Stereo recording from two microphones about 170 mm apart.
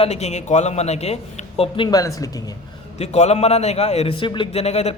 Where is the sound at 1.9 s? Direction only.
20° left (ahead or behind).